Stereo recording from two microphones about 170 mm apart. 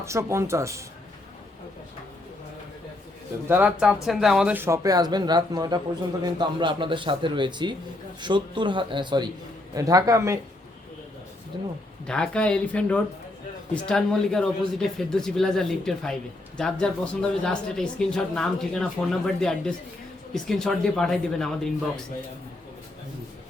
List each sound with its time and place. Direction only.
0.0 s speech: 15° right (ahead or behind)
3.4 s a man's voice: 10° right (ahead or behind)
11.5 s a man's voice: 25° right (ahead or behind)
12.0 s speech: 5° left (ahead or behind)